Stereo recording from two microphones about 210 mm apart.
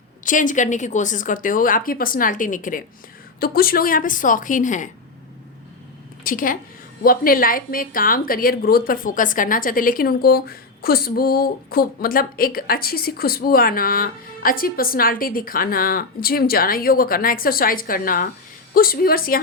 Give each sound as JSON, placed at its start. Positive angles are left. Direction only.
{"t": 0.3, "sound": "speech", "side_deg": 40}
{"t": 6.2, "sound": "a woman's voice", "side_deg": 40}